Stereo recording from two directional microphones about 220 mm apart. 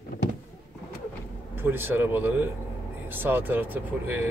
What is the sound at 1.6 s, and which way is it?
Speech, 10° right (ahead or behind).